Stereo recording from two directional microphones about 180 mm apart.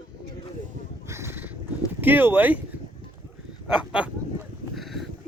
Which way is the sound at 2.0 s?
10° right (ahead or behind).